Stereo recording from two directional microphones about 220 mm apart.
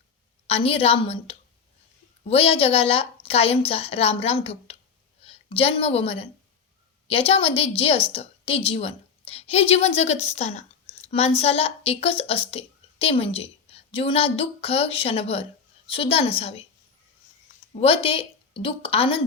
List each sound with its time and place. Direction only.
0.4 s a woman's voice: 25° left (ahead or behind)
17.7 s a woman's voice: 25° left (ahead or behind)